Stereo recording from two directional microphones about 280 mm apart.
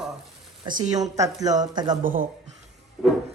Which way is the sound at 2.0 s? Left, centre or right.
Right.